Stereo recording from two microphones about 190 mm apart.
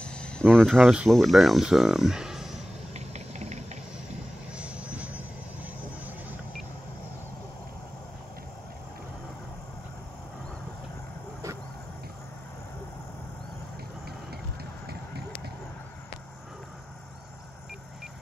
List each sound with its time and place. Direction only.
0.0 s speech: 5° left (ahead or behind)
2.9 s vehicle: 35° right (ahead or behind)
4.6 s vehicle: 5° right (ahead or behind)
14.9 s run: 55° right (ahead or behind)